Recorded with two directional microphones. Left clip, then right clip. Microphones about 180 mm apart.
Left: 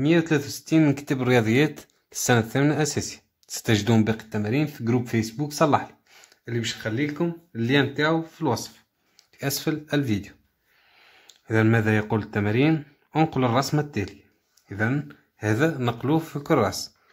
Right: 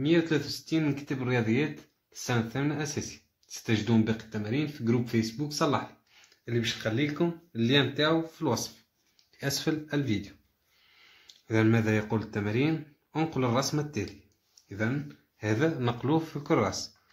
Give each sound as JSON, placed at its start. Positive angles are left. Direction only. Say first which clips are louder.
{"t": 0.0, "sound": "speech", "louder": "left 5 dB", "side_deg": 60}
{"t": 6.4, "sound": "speech", "louder": "left 2 dB", "side_deg": 40}
{"t": 9.4, "sound": "speech", "louder": "left 3 dB", "side_deg": 30}
{"t": 9.9, "sound": "speech", "louder": "left 5 dB", "side_deg": 45}
{"t": 11.4, "sound": "speech", "louder": "left 4 dB", "side_deg": 45}
{"t": 15.8, "sound": "speech", "louder": "left 4 dB", "side_deg": 35}